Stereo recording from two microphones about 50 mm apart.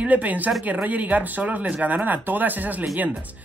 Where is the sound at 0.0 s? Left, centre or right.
Right.